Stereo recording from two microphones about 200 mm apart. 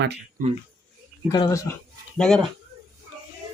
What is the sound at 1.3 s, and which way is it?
Speech, 20° left (ahead or behind).